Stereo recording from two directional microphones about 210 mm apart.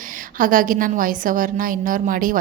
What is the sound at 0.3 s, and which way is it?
A woman's voice, 40° right (ahead or behind).